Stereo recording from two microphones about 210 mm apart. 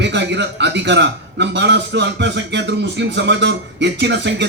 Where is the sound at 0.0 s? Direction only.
55° right (ahead or behind).